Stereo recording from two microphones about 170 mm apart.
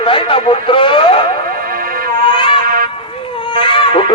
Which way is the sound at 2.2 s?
30° left (ahead or behind).